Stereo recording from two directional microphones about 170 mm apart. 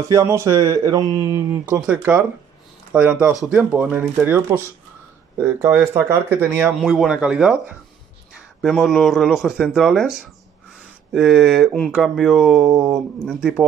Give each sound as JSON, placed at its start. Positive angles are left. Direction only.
{"t": 0.1, "sound": "speech", "side_deg": -15}
{"t": 8.5, "sound": "speech", "side_deg": 0}